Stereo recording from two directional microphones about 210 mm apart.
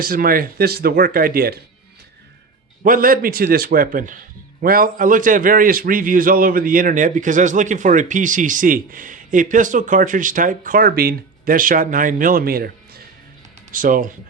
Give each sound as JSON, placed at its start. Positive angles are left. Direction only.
{"t": 0.0, "sound": "speech", "side_deg": -45}
{"t": 2.8, "sound": "a man's voice", "side_deg": -40}